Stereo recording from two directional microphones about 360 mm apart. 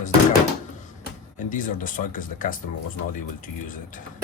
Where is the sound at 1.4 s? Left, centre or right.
Left.